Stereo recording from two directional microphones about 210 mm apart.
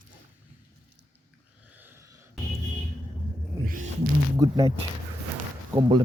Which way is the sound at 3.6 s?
40° right (ahead or behind).